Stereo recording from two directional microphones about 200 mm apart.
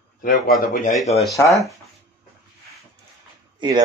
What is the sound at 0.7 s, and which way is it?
Speech, 40° left (ahead or behind).